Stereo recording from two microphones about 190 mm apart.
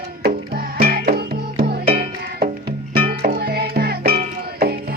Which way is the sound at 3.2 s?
50° right (ahead or behind).